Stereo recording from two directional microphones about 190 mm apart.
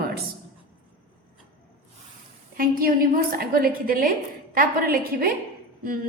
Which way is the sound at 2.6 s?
50° right (ahead or behind).